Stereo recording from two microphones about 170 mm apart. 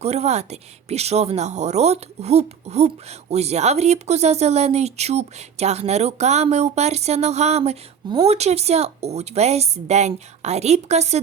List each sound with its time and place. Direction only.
0.0 s a woman's voice: 40° right (ahead or behind)